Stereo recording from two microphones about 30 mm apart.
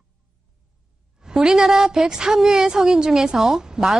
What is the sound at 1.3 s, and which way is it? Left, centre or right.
A woman's voice, right.